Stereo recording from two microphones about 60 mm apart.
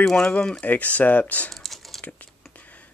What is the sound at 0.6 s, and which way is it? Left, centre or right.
Speech, left.